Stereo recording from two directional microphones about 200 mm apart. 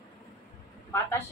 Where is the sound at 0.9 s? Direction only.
10° left (ahead or behind).